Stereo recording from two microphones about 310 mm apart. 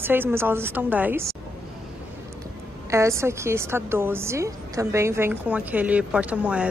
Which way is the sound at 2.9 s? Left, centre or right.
Centre.